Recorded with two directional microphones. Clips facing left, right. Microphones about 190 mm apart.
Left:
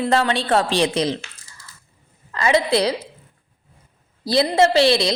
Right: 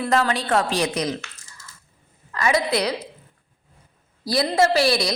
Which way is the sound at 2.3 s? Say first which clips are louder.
Left 3 dB; 25° left (ahead or behind).